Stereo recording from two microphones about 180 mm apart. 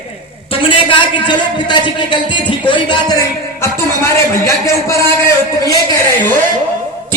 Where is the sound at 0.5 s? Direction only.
30° left (ahead or behind).